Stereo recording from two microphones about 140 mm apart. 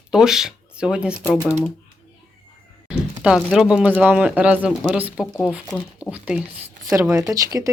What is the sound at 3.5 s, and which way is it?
Speech, 5° right (ahead or behind).